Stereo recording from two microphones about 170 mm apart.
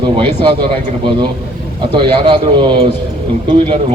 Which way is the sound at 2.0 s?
30° right (ahead or behind).